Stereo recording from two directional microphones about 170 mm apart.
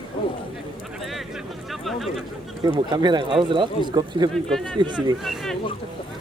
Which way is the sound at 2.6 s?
25° right (ahead or behind).